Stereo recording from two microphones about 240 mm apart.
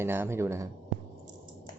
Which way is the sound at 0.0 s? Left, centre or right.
Centre.